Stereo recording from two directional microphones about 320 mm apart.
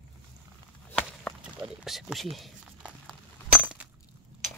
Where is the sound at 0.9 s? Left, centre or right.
Centre.